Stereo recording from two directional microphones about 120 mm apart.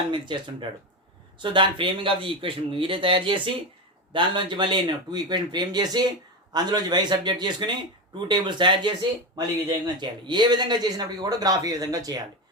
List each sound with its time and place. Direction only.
0.1 s a man's voice: 40° right (ahead or behind)